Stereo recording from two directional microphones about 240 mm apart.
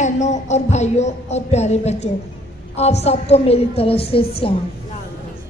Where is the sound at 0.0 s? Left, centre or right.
Left.